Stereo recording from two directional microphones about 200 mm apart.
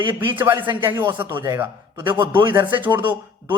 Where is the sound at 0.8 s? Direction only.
10° right (ahead or behind).